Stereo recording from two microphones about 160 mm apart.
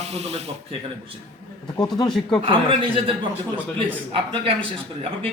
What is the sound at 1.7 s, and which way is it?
Speech, 25° left (ahead or behind).